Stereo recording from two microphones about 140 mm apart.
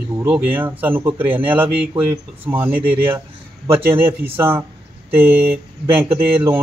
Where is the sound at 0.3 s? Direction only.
15° right (ahead or behind).